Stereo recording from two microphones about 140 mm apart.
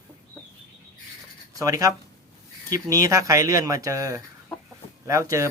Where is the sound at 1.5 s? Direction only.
25° right (ahead or behind).